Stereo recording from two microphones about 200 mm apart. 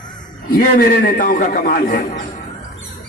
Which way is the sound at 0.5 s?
45° left (ahead or behind).